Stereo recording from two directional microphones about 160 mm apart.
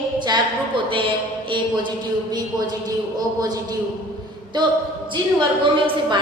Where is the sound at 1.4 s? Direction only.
30° right (ahead or behind).